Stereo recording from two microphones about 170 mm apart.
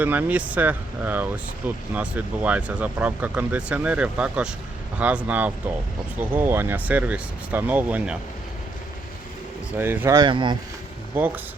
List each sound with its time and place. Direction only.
0.0 s speech: 10° right (ahead or behind)
9.7 s speech: 10° right (ahead or behind)
10.2 s speech: 30° right (ahead or behind)
11.1 s speech: 10° right (ahead or behind)